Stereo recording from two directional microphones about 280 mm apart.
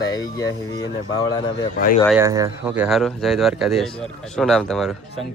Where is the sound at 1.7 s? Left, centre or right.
Left.